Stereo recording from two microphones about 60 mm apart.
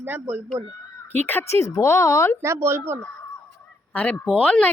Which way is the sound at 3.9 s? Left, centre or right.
Left.